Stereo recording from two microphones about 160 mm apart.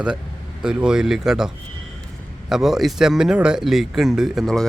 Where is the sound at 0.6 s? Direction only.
5° right (ahead or behind).